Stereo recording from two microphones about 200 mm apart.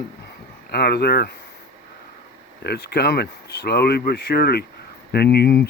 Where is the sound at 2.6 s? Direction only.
55° left (ahead or behind).